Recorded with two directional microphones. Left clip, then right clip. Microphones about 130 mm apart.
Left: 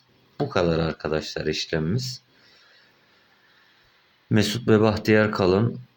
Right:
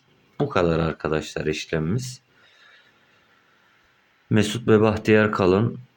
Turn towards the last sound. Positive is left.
turn(degrees=-15)  # may be behind; listen again after turning